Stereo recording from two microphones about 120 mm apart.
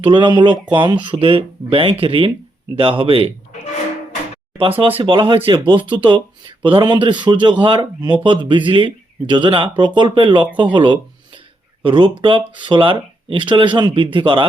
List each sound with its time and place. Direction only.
0.0 s speech: 40° right (ahead or behind)
4.9 s speech: 45° right (ahead or behind)
5.8 s speech: 15° right (ahead or behind)
6.1 s speech: 40° right (ahead or behind)